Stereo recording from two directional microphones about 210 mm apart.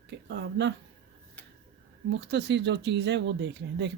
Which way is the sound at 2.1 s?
55° right (ahead or behind).